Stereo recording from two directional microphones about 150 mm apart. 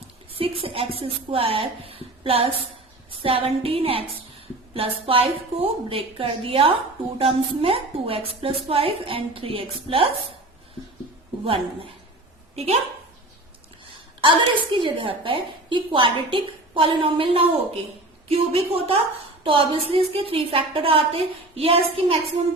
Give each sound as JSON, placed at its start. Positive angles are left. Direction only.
{"t": 0.3, "sound": "a woman's voice", "side_deg": -40}
{"t": 12.5, "sound": "a woman's voice", "side_deg": -45}
{"t": 14.2, "sound": "a woman's voice", "side_deg": -35}